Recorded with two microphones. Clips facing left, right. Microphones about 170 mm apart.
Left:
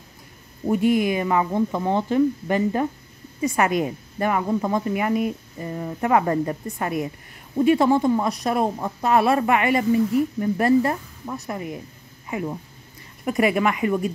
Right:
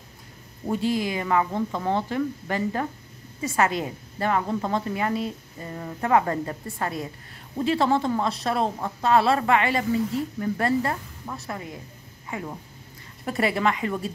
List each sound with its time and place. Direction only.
0.9 s a woman's voice: 20° left (ahead or behind)